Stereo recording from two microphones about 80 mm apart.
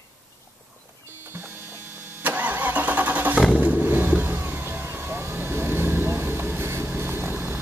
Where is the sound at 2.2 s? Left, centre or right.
Right.